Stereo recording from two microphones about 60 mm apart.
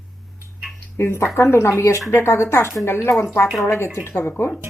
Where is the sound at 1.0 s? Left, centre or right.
Left.